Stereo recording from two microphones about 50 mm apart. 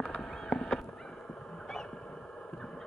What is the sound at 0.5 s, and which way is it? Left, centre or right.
Fowl, centre.